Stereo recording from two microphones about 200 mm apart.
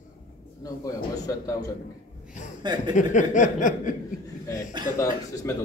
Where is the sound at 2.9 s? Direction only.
40° left (ahead or behind).